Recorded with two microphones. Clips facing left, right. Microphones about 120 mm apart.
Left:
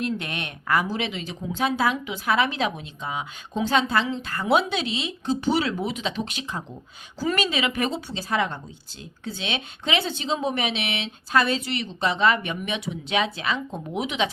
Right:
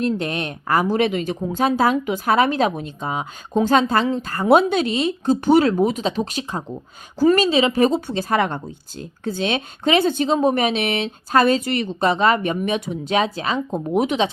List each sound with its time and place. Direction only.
0.0 s speech: 40° right (ahead or behind)
0.9 s speech: 50° right (ahead or behind)